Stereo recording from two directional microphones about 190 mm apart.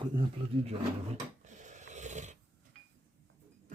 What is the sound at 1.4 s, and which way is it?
Snoring, 40° right (ahead or behind).